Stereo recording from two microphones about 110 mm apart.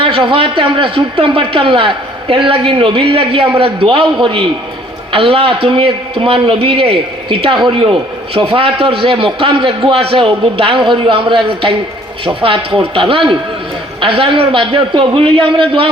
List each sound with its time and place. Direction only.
0.0 s speech: 50° right (ahead or behind)